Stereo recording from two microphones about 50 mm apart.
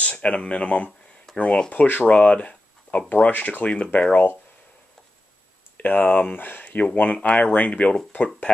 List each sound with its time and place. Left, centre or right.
0.0 s speech: left
3.1 s speech: left
5.8 s speech: left
6.6 s speech: left